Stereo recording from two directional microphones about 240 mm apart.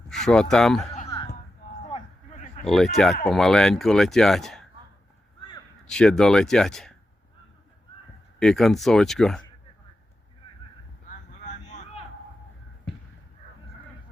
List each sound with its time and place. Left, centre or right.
0.1 s speech: centre
0.9 s a sound: left
2.6 s speech: centre
5.8 s speech: centre
8.4 s speech: centre
11.1 s vehicle: left